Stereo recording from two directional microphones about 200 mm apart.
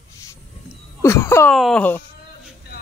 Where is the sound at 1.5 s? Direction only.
5° left (ahead or behind).